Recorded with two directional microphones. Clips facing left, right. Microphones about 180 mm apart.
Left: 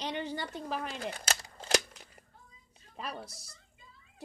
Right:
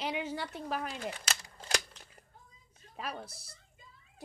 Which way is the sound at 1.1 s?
35° left (ahead or behind).